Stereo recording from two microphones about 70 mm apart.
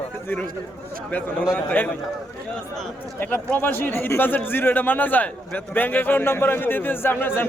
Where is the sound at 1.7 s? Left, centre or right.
Centre.